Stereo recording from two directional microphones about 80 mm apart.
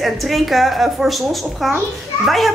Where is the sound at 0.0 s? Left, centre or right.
Centre.